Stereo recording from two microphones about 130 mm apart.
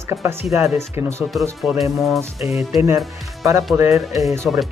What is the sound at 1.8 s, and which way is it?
Speech, centre (ahead or behind).